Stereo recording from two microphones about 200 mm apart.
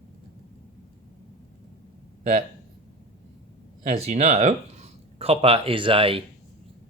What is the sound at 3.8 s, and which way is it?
Speech, 35° right (ahead or behind).